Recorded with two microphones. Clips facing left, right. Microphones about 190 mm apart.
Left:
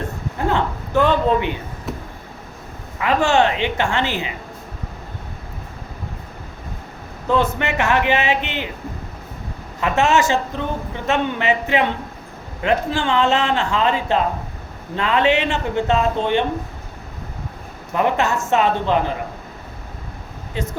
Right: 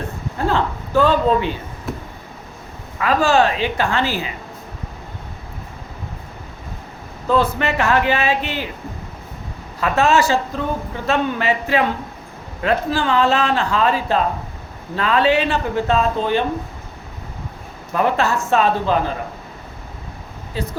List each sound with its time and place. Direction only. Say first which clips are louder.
0.3 s a man's voice: right 1 dB; 20° left (ahead or behind)
3.0 s a man's voice: right 1 dB; 20° left (ahead or behind)
7.3 s a man's voice: right 1 dB; 20° left (ahead or behind)
9.8 s a man's voice: right 1 dB; 20° left (ahead or behind)
17.9 s a man's voice: right 1 dB; 20° left (ahead or behind)
20.6 s a man's voice: even; 20° left (ahead or behind)